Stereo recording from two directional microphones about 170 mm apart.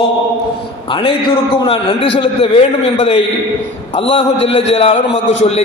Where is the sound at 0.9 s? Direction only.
30° left (ahead or behind).